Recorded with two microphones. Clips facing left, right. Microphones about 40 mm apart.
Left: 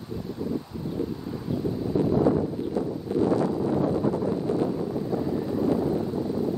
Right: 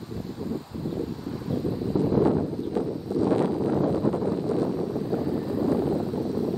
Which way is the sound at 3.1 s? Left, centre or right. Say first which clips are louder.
Left 1 dB; left.